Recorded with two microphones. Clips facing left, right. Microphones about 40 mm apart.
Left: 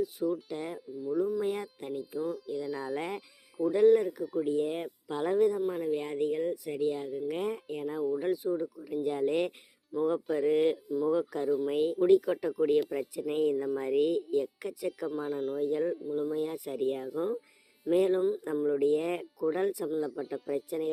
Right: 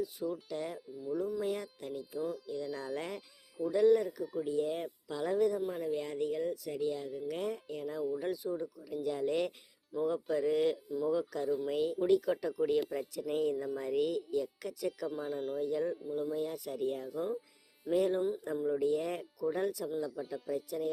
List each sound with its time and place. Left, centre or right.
0.0 s speech: centre
2.1 s speech: centre
2.5 s speech: centre
5.5 s speech: centre
5.8 s speech: left
9.9 s speech: centre
10.2 s speech: centre
14.8 s speech: centre
15.6 s speech: centre
16.4 s speech: left
17.2 s speech: centre
17.9 s speech: left
18.5 s speech: left